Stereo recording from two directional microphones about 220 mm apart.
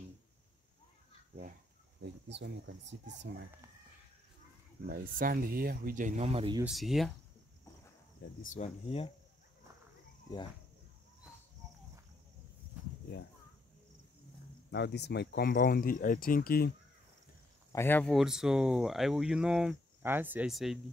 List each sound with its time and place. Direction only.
2.0 s speech: 55° right (ahead or behind)
4.8 s speech: 40° right (ahead or behind); by 6.6 s 25° right (ahead or behind)
6.6 s speech: centre (ahead or behind)
8.2 s speech: 40° left (ahead or behind)
14.7 s speech: 50° left (ahead or behind)
17.7 s speech: 10° left (ahead or behind)